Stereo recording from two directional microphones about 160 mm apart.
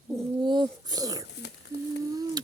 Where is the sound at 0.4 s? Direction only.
30° right (ahead or behind).